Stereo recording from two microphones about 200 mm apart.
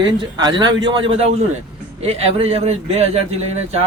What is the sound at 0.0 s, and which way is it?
A man's voice, 20° right (ahead or behind).